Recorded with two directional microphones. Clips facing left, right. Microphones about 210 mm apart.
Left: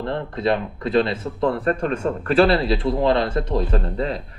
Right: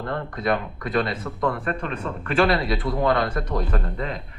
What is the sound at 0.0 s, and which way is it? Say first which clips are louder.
Speech: left 4 dB; 25° left (ahead or behind).